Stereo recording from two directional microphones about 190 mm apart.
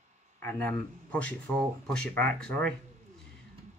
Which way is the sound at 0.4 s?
10° left (ahead or behind).